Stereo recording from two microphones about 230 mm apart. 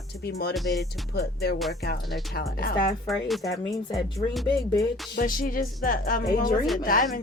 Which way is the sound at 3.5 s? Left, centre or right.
Centre.